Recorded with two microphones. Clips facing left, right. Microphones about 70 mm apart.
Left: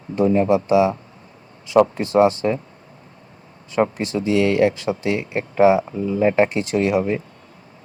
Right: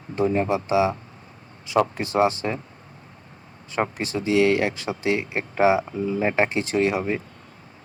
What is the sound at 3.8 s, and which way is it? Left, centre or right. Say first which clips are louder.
Speech: left 5 dB; right.